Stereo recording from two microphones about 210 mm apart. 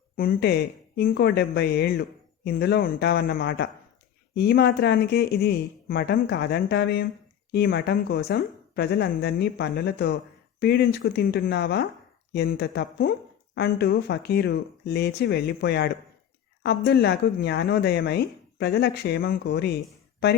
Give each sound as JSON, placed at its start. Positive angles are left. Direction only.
{"t": 0.2, "sound": "speech", "side_deg": 50}